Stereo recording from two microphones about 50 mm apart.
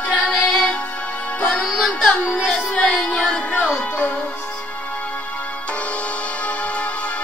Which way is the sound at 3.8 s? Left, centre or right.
Left.